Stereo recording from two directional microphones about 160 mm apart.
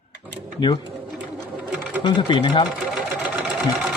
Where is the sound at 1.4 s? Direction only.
5° right (ahead or behind).